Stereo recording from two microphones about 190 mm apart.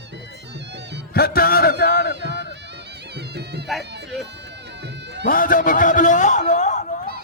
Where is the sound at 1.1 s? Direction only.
55° left (ahead or behind).